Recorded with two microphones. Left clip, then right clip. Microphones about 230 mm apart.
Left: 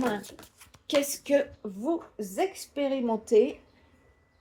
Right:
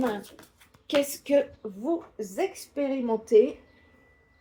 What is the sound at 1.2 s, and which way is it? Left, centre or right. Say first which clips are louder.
A woman's voice: right 2 dB; left.